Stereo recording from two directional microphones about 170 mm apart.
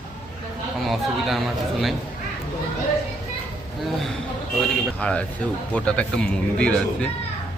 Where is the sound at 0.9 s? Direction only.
Centre (ahead or behind).